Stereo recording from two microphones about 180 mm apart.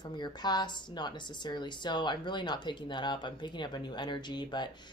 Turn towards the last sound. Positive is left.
turn(degrees=25)  # may be behind; listen again after turning